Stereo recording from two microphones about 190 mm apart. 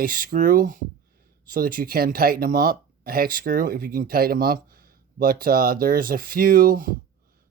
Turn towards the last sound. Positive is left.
turn(degrees=-50)  # may be behind; listen again after turning